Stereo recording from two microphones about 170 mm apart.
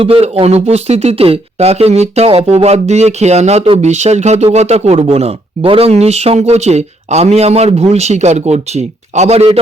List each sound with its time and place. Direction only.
0.0 s speech: 35° right (ahead or behind)